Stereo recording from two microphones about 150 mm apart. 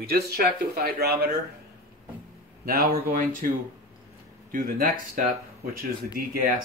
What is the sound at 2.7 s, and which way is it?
Speech, 90° right.